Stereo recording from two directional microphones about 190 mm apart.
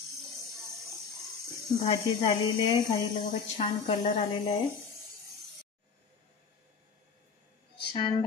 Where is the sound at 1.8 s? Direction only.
25° left (ahead or behind).